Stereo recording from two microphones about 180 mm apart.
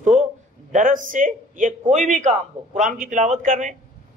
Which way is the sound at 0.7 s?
45° right (ahead or behind).